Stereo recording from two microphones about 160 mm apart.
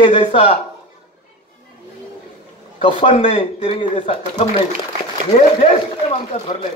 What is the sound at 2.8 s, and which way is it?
Speech, 35° left (ahead or behind).